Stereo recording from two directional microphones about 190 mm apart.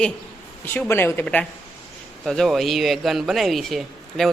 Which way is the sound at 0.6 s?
10° left (ahead or behind).